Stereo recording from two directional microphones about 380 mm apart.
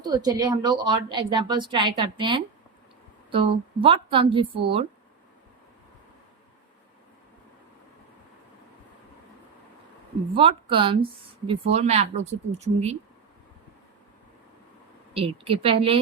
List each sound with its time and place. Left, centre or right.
0.0 s a woman's voice: centre
10.3 s a woman's voice: centre
15.1 s a woman's voice: centre